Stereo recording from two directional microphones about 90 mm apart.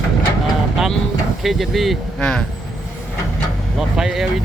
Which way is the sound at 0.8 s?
5° right (ahead or behind).